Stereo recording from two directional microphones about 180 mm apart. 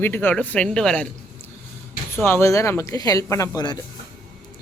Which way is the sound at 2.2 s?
15° left (ahead or behind).